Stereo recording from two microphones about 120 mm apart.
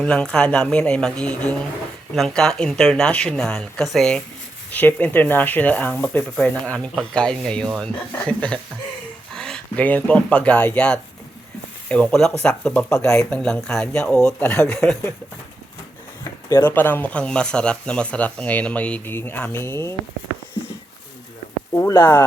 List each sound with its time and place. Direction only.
0.0 s speech: 5° left (ahead or behind)
12.9 s speech: 25° left (ahead or behind)
13.3 s speech: 5° left (ahead or behind)
14.3 s speech: 15° left (ahead or behind)
14.7 s speech: 5° left (ahead or behind)
16.6 s speech: 15° left (ahead or behind)
21.7 s speech: 25° left (ahead or behind)